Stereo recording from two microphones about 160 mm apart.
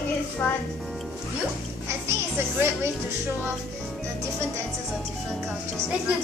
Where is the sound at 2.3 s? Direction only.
15° right (ahead or behind).